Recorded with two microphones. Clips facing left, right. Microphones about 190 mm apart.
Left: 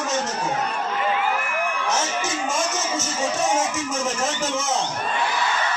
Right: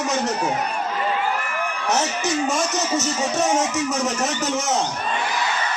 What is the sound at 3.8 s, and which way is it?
Speech, 70° right (ahead or behind).